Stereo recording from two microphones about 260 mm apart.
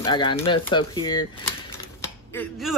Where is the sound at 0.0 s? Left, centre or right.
Centre.